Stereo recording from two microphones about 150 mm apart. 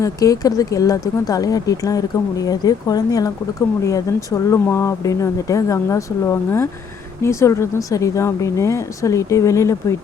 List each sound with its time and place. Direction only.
0.0 s speech: 25° left (ahead or behind)